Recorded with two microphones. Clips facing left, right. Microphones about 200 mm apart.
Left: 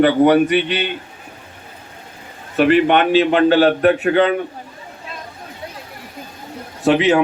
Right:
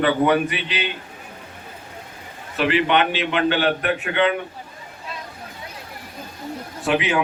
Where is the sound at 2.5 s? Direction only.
50° left (ahead or behind).